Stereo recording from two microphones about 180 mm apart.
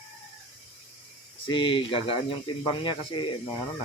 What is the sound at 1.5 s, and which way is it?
Speech, 25° left (ahead or behind).